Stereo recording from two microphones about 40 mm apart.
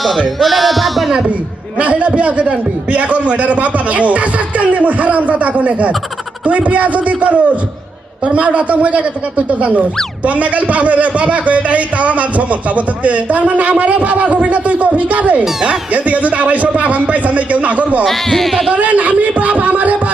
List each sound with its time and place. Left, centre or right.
0.3 s sheep: centre
1.8 s a man's voice: right
18.0 s speech: centre
18.7 s a man's voice: right